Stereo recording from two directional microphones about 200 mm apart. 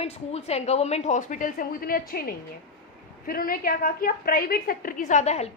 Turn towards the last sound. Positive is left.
turn(degrees=35)  # may be behind; listen again after turning